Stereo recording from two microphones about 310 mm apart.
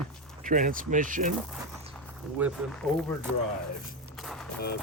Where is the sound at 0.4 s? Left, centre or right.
Right.